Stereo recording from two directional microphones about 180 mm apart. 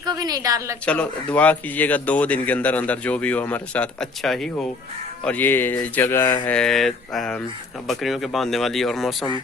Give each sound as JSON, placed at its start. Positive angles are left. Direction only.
{"t": 0.0, "sound": "a woman's voice", "side_deg": -20}
{"t": 0.9, "sound": "speech", "side_deg": 5}